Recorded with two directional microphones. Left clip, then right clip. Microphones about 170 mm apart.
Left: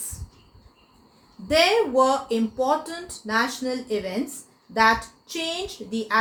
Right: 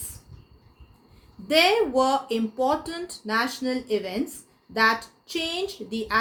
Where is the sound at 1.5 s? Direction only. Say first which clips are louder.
Left 1 dB; 50° right (ahead or behind).